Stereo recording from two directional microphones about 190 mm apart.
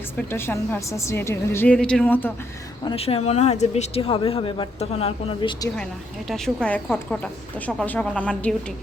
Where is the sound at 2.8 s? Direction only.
30° left (ahead or behind).